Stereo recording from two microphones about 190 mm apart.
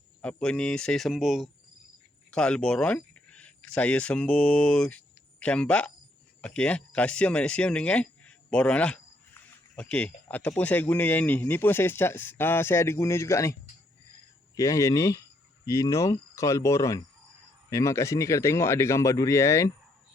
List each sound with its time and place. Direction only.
0.2 s speech: 5° left (ahead or behind)